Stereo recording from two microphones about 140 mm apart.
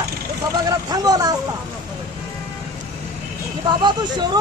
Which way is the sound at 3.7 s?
30° right (ahead or behind).